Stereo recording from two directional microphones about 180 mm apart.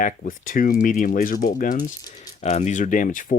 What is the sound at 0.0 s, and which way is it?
Speech, 50° left (ahead or behind).